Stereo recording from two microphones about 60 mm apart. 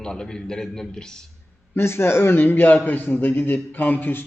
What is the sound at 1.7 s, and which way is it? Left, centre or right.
A man's voice, left.